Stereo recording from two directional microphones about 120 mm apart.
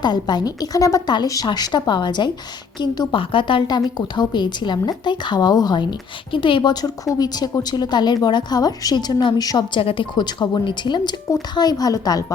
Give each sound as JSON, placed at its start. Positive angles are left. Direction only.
{"t": 0.0, "sound": "a woman's voice", "side_deg": 35}
{"t": 9.8, "sound": "a woman's voice", "side_deg": 45}